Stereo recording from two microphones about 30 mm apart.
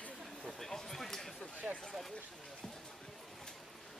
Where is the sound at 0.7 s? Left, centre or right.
Centre.